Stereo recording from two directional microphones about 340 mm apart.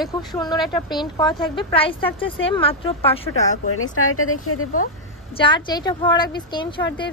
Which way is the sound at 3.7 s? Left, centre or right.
Left.